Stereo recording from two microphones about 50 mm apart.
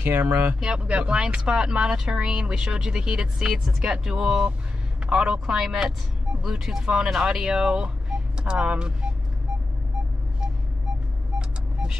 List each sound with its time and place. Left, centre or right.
0.0 s speech: right
0.6 s speech: right
11.3 s vehicle: centre